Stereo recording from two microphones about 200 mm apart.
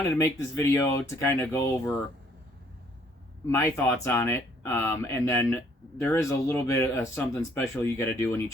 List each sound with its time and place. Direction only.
0.0 s speech: 15° left (ahead or behind)
3.5 s speech: 15° left (ahead or behind)